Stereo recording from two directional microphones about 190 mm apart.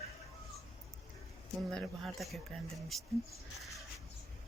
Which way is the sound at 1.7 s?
Centre (ahead or behind).